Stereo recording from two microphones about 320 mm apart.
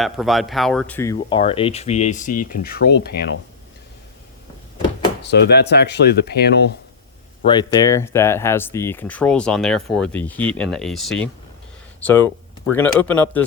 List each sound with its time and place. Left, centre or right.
0.0 s speech: centre; by 3.2 s left
5.2 s speech: left
7.4 s speech: centre